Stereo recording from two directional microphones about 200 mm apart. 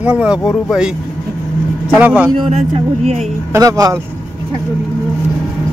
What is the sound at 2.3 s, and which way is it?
Speech, 30° right (ahead or behind).